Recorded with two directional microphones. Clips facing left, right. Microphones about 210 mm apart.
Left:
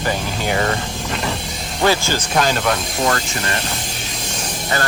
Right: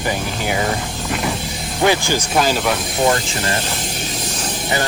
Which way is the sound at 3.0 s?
20° right (ahead or behind).